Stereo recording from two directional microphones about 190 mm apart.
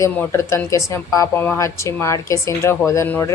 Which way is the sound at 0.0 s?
15° left (ahead or behind).